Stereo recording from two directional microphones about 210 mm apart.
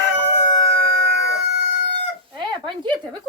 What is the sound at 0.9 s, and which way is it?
Chicken, 55° right (ahead or behind).